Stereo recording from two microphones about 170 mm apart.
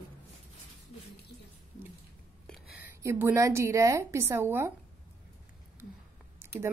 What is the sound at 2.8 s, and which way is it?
A woman's voice, 15° right (ahead or behind).